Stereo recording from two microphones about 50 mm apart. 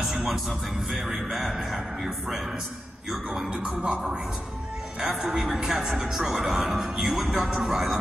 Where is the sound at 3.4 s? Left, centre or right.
Centre.